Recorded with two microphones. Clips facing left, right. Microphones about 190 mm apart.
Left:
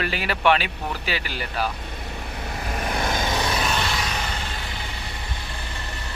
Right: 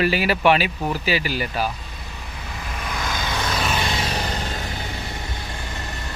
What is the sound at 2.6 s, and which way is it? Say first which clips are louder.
Vehicle: left 3 dB; 45° left (ahead or behind).